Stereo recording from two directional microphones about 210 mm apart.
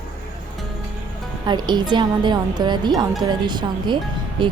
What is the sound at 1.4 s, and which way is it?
A woman's voice, 20° right (ahead or behind).